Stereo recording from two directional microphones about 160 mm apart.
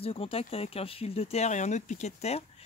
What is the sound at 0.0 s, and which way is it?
Speech, 35° left (ahead or behind).